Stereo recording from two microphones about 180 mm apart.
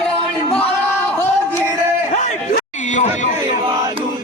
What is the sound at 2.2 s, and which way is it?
Chatter, 40° left (ahead or behind).